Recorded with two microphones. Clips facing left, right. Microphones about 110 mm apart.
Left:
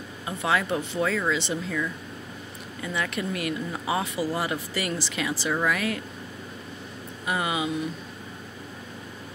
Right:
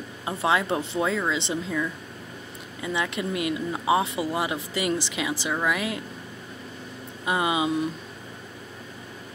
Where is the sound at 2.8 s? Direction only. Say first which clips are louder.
Right 2 dB; 20° right (ahead or behind).